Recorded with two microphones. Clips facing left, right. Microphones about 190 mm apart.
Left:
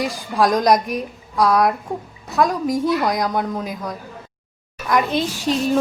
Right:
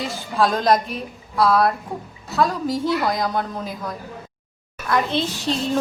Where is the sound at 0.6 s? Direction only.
15° left (ahead or behind).